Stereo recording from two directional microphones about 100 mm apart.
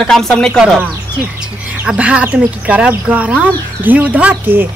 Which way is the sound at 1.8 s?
15° right (ahead or behind).